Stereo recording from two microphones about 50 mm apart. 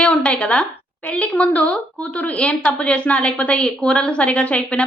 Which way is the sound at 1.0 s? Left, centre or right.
Left.